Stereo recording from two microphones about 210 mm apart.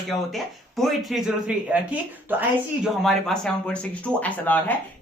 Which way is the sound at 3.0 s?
Centre (ahead or behind).